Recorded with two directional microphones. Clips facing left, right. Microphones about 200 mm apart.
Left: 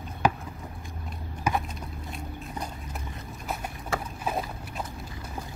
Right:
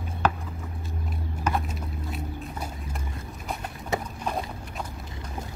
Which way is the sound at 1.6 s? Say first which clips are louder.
Right 4 dB; 5° right (ahead or behind).